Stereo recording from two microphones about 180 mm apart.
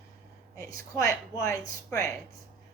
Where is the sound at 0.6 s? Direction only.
20° left (ahead or behind).